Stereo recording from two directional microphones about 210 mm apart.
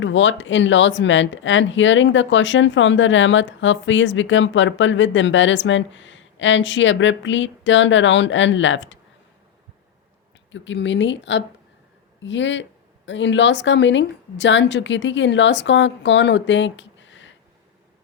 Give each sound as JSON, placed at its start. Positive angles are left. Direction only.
{"t": 0.0, "sound": "speech", "side_deg": 65}
{"t": 10.5, "sound": "speech", "side_deg": 60}